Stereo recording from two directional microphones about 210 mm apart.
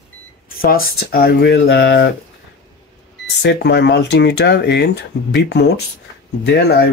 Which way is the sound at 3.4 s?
55° left (ahead or behind).